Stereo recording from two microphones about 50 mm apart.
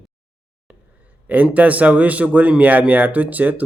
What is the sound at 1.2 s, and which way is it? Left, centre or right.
A man's voice, right.